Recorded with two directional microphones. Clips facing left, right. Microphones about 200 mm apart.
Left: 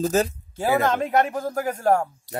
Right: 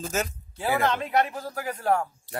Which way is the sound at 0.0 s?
35° left (ahead or behind).